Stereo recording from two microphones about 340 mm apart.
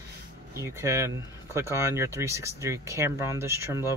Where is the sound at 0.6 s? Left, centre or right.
Centre.